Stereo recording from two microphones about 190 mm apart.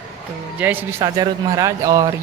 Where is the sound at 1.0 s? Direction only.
20° right (ahead or behind).